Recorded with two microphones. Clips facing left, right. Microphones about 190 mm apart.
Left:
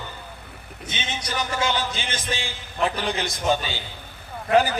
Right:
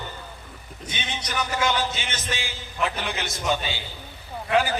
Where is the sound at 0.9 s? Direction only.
25° left (ahead or behind).